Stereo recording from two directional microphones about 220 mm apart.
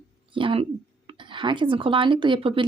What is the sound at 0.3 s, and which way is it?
Speech, 25° right (ahead or behind).